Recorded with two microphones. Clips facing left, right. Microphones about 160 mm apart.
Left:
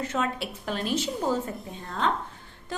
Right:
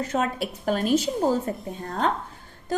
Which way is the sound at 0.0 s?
40° right (ahead or behind).